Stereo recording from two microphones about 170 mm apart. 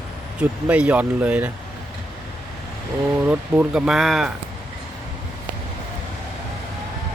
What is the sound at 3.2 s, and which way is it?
Speech, 5° right (ahead or behind).